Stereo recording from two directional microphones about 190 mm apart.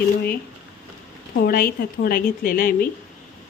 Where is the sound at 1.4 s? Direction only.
50° left (ahead or behind).